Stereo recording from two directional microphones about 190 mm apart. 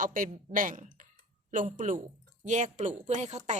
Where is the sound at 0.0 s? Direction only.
45° right (ahead or behind).